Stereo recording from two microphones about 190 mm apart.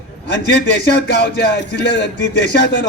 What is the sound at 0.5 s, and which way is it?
Speech, 60° left (ahead or behind).